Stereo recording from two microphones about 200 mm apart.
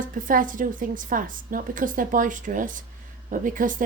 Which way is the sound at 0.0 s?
40° right (ahead or behind).